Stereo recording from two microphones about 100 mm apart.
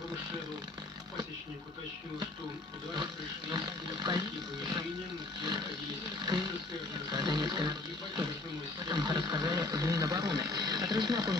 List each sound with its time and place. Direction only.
3.0 s speech: 50° right (ahead or behind)
6.1 s speech: 45° right (ahead or behind)
8.8 s speech: 45° right (ahead or behind)